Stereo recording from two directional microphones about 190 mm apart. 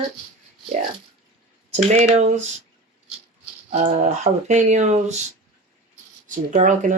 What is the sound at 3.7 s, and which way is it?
Speech, 35° right (ahead or behind).